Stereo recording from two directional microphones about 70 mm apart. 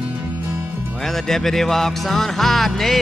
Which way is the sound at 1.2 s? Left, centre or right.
Centre.